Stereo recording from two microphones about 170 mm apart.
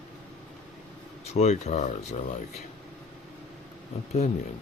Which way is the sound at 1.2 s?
40° left (ahead or behind).